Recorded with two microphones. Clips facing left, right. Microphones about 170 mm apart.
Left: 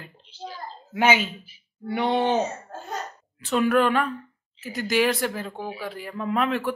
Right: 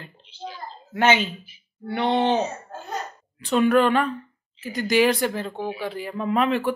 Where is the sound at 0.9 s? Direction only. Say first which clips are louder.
Right 1 dB; 10° left (ahead or behind).